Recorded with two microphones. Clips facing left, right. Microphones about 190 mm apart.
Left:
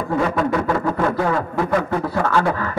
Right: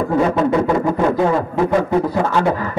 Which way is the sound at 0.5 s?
20° right (ahead or behind).